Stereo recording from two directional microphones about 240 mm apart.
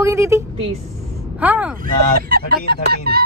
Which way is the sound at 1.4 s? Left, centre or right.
Centre.